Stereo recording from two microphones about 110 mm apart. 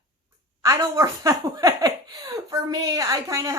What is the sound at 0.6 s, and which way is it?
A woman's voice, 30° right (ahead or behind).